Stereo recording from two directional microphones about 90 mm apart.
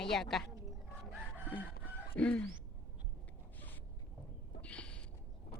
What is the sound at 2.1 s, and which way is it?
Speech, 15° left (ahead or behind).